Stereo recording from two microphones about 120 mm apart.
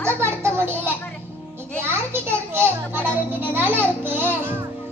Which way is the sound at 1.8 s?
20° right (ahead or behind).